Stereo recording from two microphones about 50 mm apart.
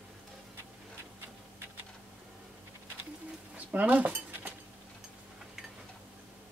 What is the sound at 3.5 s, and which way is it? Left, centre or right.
Speech, right.